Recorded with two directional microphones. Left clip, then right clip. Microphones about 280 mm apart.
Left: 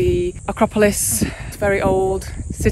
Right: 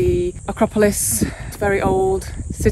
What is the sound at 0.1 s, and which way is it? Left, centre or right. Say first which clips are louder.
Cricket: even; right.